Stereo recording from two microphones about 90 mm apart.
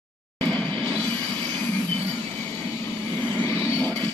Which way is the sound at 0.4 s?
15° left (ahead or behind).